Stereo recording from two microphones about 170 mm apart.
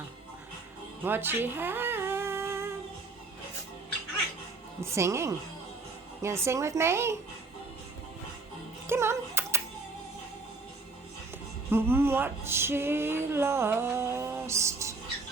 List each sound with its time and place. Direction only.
1.0 s humming: 10° right (ahead or behind)
4.8 s speech: 15° right (ahead or behind)
8.9 s music: 15° right (ahead or behind)
11.7 s speech: 15° right (ahead or behind)